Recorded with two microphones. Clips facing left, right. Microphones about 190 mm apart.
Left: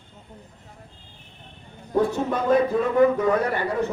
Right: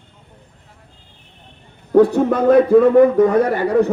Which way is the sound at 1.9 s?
70° right (ahead or behind).